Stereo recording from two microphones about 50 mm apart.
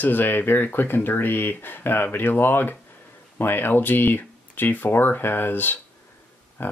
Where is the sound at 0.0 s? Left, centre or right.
Left.